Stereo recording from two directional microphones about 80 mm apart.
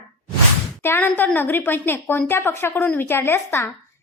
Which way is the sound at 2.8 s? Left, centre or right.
Centre.